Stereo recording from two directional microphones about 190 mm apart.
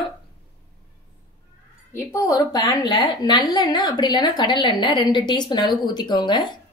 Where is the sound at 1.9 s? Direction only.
15° left (ahead or behind).